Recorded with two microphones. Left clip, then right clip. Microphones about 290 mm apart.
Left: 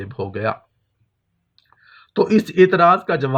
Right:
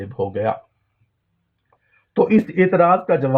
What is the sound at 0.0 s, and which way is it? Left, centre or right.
Speech, left.